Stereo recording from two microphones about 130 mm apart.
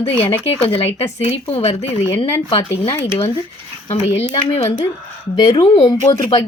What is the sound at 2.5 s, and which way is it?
Speech, 45° left (ahead or behind).